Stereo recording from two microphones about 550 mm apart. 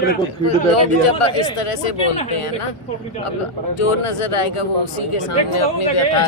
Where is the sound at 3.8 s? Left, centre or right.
Left.